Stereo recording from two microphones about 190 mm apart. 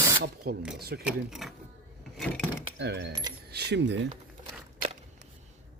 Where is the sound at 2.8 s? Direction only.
60° right (ahead or behind).